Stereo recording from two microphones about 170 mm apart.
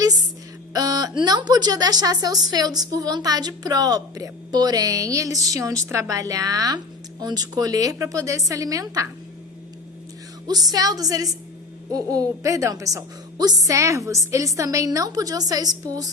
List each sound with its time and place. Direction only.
0.7 s speech: 20° right (ahead or behind)
10.4 s speech: 20° right (ahead or behind)